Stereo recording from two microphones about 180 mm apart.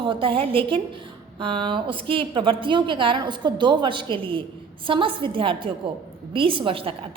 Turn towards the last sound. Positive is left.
turn(degrees=-30)  # may be behind; listen again after turning